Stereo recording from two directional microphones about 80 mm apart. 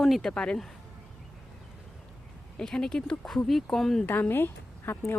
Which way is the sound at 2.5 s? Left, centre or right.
Centre.